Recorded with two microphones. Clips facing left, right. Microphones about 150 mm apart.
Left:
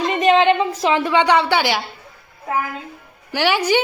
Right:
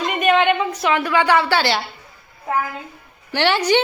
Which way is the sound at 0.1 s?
30° left (ahead or behind).